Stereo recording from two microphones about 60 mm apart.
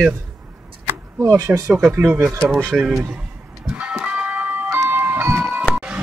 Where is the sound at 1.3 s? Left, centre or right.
Right.